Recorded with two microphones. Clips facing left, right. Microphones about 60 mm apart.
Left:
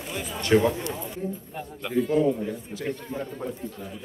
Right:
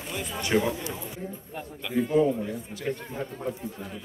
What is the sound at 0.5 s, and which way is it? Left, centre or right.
Speech, centre.